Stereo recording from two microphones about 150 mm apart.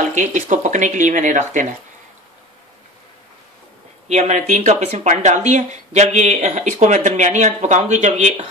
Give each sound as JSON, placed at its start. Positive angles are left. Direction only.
{"t": 0.1, "sound": "speech", "side_deg": -55}
{"t": 4.1, "sound": "speech", "side_deg": -50}